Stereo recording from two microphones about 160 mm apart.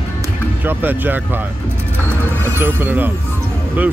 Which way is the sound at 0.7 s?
10° right (ahead or behind).